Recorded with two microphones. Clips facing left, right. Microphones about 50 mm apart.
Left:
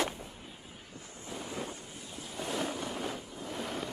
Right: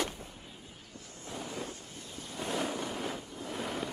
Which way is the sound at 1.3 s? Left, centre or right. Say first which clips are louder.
Even; centre.